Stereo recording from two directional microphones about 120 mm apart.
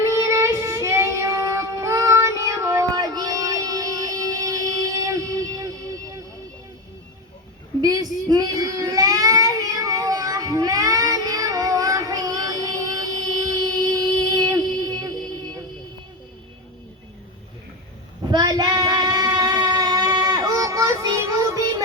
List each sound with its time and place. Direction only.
0.0 s child singing: 25° right (ahead or behind)
7.8 s child singing: 30° right (ahead or behind)
18.3 s child singing: 35° right (ahead or behind)